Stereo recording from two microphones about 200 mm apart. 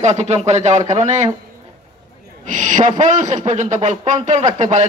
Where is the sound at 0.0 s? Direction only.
35° right (ahead or behind).